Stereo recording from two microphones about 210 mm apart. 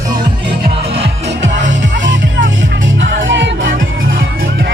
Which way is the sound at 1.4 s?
60° right (ahead or behind).